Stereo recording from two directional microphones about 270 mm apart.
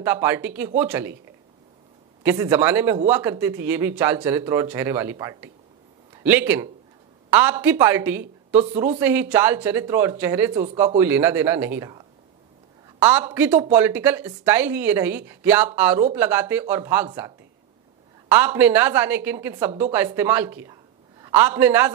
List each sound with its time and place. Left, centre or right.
0.0 s speech: centre
2.2 s speech: centre
10.5 s speech: right
11.0 s speech: centre
18.3 s a man's voice: centre